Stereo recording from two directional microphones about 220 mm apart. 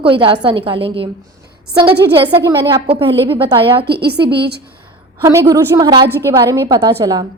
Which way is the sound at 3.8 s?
45° right (ahead or behind).